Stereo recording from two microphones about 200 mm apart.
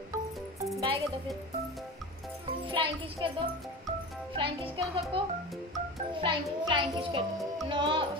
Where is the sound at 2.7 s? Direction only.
25° right (ahead or behind).